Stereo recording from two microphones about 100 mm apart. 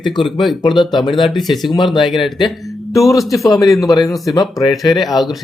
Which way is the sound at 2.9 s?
30° left (ahead or behind).